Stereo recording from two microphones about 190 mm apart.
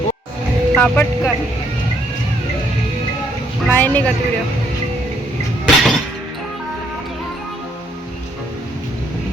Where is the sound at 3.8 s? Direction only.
10° left (ahead or behind).